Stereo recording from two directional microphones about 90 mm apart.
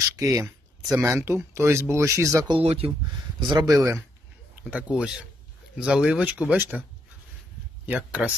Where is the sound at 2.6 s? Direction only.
90° right.